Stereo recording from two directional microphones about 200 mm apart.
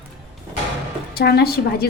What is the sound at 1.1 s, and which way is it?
Speech, 50° left (ahead or behind).